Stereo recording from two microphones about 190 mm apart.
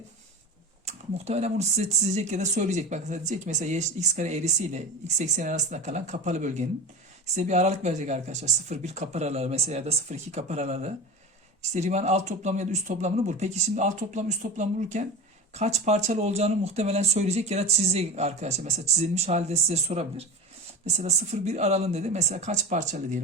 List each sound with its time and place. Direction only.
0.9 s speech: 35° right (ahead or behind)